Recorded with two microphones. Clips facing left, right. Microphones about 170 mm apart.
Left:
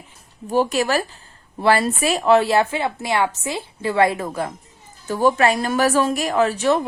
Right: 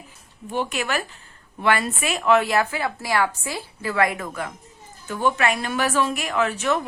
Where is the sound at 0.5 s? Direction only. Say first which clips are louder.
Left 7 dB; 35° left (ahead or behind).